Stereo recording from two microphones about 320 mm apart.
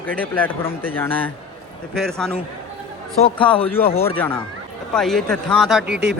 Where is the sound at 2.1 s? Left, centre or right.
Centre.